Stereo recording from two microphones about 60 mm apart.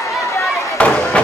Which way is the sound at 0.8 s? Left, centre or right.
Centre.